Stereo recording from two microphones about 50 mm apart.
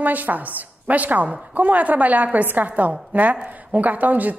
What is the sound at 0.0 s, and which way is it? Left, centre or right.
A woman's voice, right.